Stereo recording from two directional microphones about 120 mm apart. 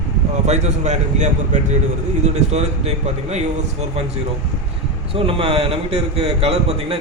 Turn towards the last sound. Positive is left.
turn(degrees=-55)  # may be behind; listen again after turning